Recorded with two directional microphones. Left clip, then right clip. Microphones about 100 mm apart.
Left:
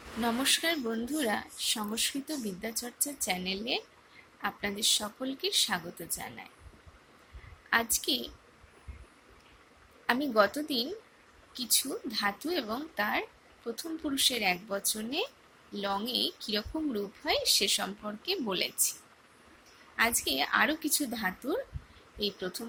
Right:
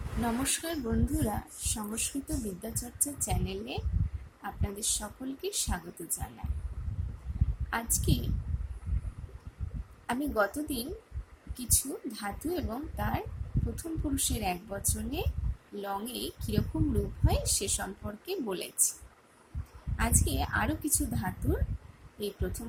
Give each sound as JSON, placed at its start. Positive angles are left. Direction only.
{"t": 0.4, "sound": "a woman's voice", "side_deg": -5}
{"t": 7.7, "sound": "a woman's voice", "side_deg": -5}
{"t": 10.1, "sound": "a woman's voice", "side_deg": 0}
{"t": 20.0, "sound": "a woman's voice", "side_deg": -5}